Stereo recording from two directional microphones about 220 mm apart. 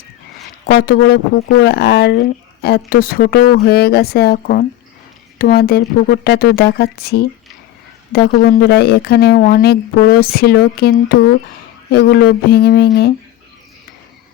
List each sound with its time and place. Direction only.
0.7 s speech: 45° left (ahead or behind)